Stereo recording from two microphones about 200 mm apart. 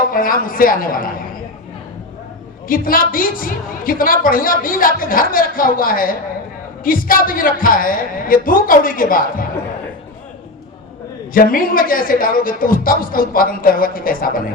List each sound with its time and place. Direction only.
0.1 s a woman's voice: 45° left (ahead or behind)
2.6 s a woman's voice: 45° left (ahead or behind)
11.3 s a woman's voice: 45° left (ahead or behind)